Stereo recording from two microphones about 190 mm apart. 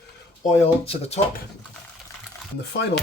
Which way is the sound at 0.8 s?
30° left (ahead or behind).